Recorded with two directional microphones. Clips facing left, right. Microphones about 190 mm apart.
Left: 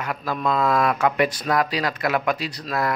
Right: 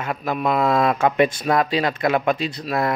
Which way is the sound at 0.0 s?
25° right (ahead or behind).